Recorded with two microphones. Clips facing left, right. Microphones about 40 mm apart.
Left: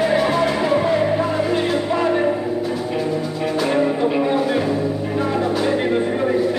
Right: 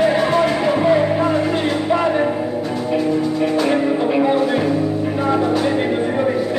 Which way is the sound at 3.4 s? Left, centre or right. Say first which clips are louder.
Left 1 dB; centre.